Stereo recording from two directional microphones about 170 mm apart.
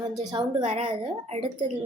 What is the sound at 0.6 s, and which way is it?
Speech, 40° right (ahead or behind).